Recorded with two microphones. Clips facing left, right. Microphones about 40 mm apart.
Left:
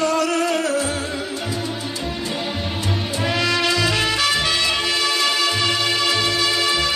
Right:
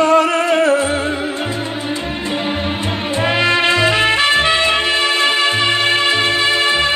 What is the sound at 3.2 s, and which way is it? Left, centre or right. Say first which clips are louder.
Music: right 6 dB; right.